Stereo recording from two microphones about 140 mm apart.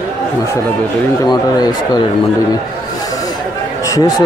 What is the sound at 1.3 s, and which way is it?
Speech, 30° left (ahead or behind).